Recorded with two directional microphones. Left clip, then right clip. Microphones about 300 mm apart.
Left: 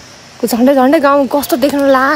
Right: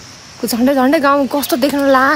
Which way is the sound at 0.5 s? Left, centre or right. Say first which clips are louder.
Left 4 dB; centre.